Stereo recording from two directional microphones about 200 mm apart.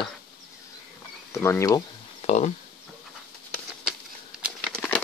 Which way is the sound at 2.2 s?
35° left (ahead or behind).